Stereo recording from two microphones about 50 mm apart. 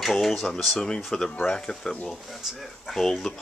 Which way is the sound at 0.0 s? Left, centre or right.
Centre.